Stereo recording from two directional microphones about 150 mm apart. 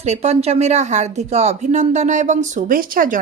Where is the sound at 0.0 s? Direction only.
45° right (ahead or behind).